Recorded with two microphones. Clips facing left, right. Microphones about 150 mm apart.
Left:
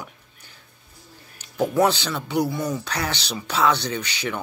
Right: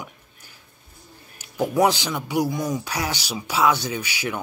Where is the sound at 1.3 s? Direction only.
10° right (ahead or behind).